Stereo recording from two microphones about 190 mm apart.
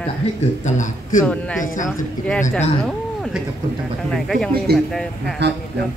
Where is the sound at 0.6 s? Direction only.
40° left (ahead or behind).